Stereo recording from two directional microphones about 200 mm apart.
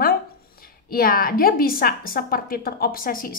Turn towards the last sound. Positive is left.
turn(degrees=45)  # may be behind; listen again after turning